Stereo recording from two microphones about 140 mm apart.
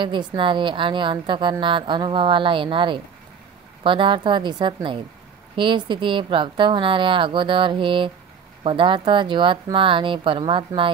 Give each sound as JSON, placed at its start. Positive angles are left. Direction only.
{"t": 0.0, "sound": "a woman's voice", "side_deg": -35}